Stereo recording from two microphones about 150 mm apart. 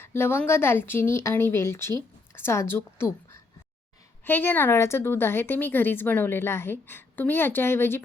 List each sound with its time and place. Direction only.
0.0 s a woman's voice: 15° left (ahead or behind)
4.2 s a woman's voice: 15° left (ahead or behind)